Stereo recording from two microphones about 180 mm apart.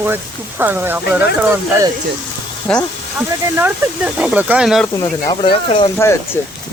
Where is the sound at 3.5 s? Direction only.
10° right (ahead or behind).